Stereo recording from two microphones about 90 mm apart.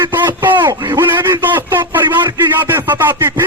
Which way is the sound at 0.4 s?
20° right (ahead or behind).